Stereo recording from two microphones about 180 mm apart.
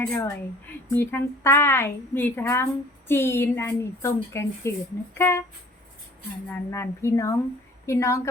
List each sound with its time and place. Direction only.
0.1 s a woman's voice: 15° left (ahead or behind)
6.5 s a woman's voice: 15° left (ahead or behind)